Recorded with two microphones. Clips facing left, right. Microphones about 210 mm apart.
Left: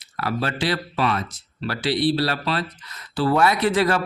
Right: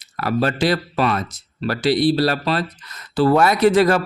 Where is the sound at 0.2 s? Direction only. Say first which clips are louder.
Right 6 dB; 45° right (ahead or behind).